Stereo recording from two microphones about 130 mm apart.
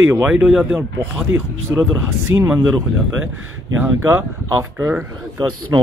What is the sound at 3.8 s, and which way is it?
Speech, 15° right (ahead or behind).